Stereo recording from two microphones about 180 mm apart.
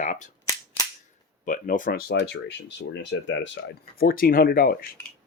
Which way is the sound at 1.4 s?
45° left (ahead or behind).